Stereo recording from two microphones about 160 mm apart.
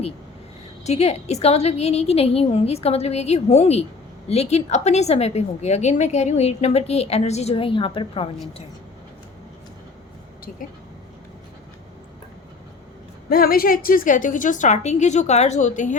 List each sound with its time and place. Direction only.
0.9 s a woman's voice: 40° left (ahead or behind)
13.3 s a woman's voice: 65° left (ahead or behind); by 16.0 s 50° left (ahead or behind)